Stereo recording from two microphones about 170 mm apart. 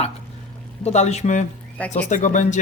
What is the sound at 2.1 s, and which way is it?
Speech, 45° left (ahead or behind).